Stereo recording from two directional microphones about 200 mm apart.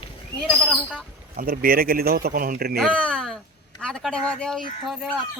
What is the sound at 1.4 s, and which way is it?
A man's voice, 45° right (ahead or behind).